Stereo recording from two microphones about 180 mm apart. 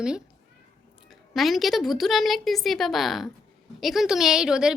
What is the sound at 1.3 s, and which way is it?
A woman's voice, centre (ahead or behind).